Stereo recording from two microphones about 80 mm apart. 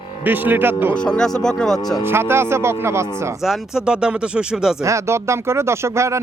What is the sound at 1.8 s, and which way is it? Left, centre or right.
Speech, left.